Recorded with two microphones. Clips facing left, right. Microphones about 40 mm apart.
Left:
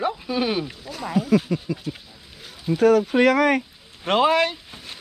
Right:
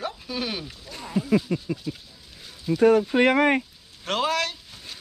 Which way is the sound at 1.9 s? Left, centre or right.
Left.